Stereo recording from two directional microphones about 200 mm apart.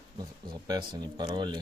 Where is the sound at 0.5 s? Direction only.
20° right (ahead or behind).